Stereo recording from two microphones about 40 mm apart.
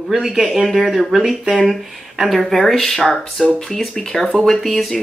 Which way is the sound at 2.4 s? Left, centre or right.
Centre.